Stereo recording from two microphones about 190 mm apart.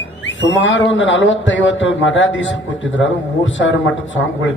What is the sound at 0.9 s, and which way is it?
A man's voice, 80° left.